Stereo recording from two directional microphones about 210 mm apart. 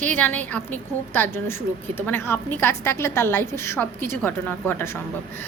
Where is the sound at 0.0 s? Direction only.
10° left (ahead or behind).